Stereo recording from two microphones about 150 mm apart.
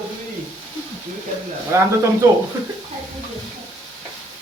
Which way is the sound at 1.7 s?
15° right (ahead or behind).